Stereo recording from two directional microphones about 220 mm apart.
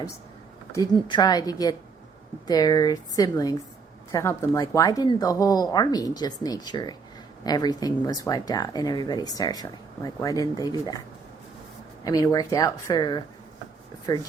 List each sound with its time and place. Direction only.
1.0 s speech: 20° left (ahead or behind)
12.0 s speech: 15° left (ahead or behind)